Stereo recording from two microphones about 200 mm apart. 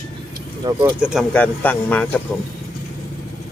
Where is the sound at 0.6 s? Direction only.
25° right (ahead or behind).